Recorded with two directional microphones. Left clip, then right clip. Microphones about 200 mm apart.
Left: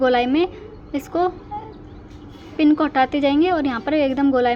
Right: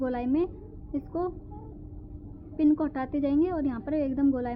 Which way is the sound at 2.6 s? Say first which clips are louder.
Left 10 dB; 10° left (ahead or behind).